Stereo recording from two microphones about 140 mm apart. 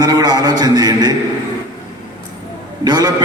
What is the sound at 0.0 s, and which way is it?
A man's voice, 30° right (ahead or behind).